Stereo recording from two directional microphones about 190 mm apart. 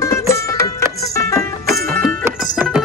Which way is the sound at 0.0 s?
15° left (ahead or behind).